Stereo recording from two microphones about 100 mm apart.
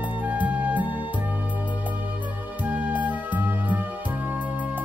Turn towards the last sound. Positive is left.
turn(degrees=-20)  # may be behind; listen again after turning